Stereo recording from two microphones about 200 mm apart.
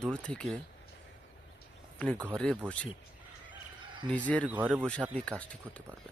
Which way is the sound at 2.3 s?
5° left (ahead or behind).